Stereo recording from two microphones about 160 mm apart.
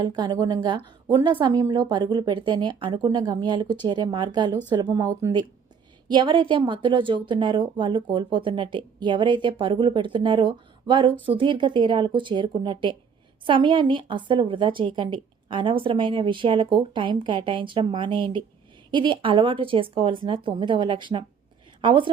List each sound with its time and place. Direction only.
0.0 s a woman's voice: 25° right (ahead or behind)